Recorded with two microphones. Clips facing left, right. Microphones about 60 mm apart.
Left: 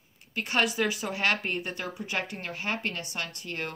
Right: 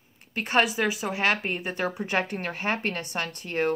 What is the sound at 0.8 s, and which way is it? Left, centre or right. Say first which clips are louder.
Speech: right 2 dB; centre.